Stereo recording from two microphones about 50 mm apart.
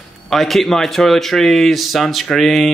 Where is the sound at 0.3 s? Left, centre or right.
Centre.